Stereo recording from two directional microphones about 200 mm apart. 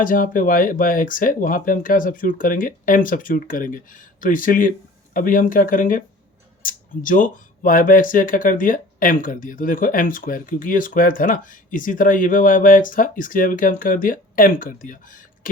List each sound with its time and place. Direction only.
0.0 s speech: 45° left (ahead or behind)